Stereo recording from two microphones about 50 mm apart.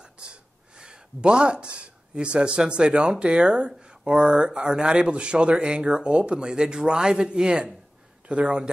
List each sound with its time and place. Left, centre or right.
0.0 s speech: centre